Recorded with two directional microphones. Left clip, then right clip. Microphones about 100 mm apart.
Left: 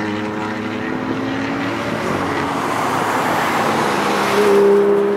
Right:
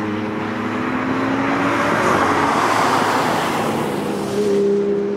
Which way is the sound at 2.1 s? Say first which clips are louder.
Right 3 dB; 5° right (ahead or behind).